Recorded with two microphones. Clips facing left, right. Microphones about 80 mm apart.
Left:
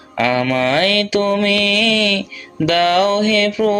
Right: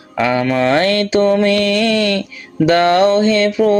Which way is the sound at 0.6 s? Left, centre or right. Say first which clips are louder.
Right 2 dB; right.